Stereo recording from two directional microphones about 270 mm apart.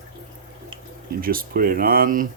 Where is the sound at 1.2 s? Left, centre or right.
Right.